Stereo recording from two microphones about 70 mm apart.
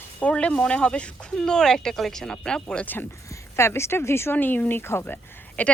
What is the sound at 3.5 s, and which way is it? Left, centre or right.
Speech, left.